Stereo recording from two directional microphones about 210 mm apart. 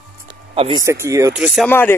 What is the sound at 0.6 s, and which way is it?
Speech, 25° right (ahead or behind).